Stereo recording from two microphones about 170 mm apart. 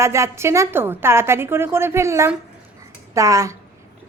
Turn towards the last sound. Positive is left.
turn(degrees=-20)  # may be behind; listen again after turning